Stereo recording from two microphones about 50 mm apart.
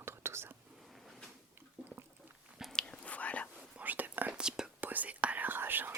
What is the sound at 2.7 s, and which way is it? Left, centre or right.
Whispering, left.